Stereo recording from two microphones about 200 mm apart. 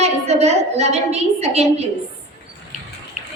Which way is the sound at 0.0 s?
30° right (ahead or behind).